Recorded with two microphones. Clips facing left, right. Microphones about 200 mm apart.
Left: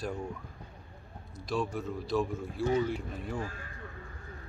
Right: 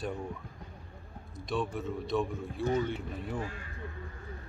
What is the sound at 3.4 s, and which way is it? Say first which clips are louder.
Speech: even; 40° left (ahead or behind).